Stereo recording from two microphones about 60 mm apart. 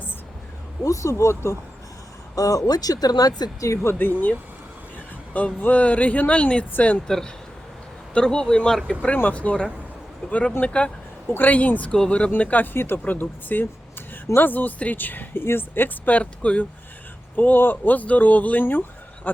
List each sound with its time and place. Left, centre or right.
0.9 s speech: left
2.3 s speech: left
3.9 s speech: left
5.5 s speech: left
8.1 s speech: centre
9.3 s speech: left
11.9 s speech: centre
12.7 s speech: left